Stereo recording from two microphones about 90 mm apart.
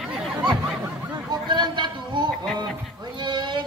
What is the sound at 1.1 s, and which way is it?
Speech, 55° right (ahead or behind).